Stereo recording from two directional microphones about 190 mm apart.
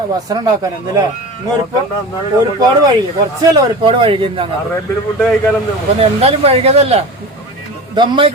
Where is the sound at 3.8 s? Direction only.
30° right (ahead or behind).